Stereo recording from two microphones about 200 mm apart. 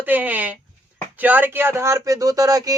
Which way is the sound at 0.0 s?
10° right (ahead or behind).